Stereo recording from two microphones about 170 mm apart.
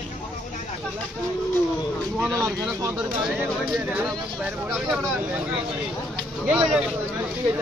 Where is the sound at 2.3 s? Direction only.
20° right (ahead or behind).